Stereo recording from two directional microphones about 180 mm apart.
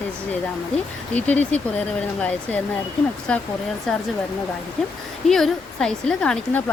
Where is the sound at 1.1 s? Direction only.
10° left (ahead or behind).